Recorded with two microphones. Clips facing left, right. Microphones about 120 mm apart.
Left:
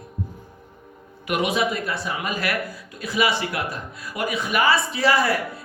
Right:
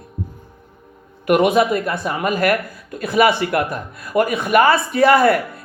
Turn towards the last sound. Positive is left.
turn(degrees=-55)  # may be behind; listen again after turning